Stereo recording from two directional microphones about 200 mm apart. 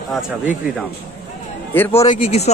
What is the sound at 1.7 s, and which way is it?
Speech, 10° left (ahead or behind).